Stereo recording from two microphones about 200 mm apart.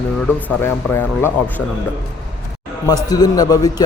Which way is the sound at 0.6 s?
10° left (ahead or behind).